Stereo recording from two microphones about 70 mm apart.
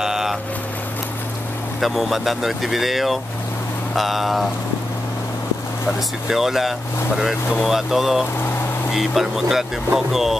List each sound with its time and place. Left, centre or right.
0.0 s boat: centre
1.8 s speech: centre
5.9 s speech: centre